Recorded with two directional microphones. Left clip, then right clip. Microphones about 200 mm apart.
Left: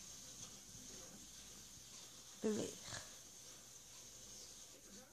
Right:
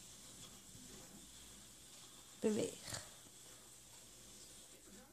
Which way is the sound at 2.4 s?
35° right (ahead or behind).